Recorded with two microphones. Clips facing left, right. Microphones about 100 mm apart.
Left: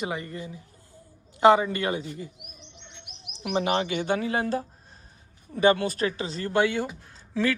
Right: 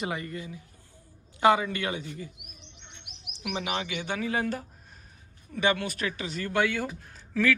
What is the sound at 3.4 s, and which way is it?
Speech, 35° left (ahead or behind).